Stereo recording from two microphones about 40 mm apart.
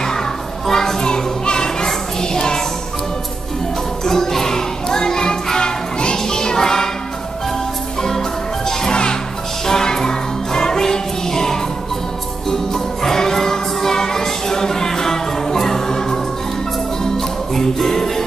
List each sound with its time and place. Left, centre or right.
0.0 s children playing: centre
4.0 s music: centre
8.0 s music: centre
17.6 s music: centre